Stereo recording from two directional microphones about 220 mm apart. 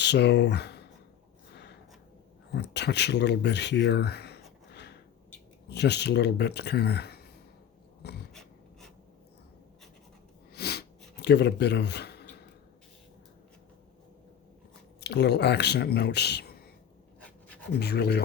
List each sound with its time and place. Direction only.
0.0 s speech: 50° left (ahead or behind)
2.6 s speech: 50° left (ahead or behind)
4.7 s a sound: 50° left (ahead or behind)
5.6 s speech: 50° left (ahead or behind)
8.3 s writing: centre (ahead or behind)
10.5 s snort: 45° left (ahead or behind)
15.0 s speech: 50° left (ahead or behind)
17.7 s speech: 50° left (ahead or behind)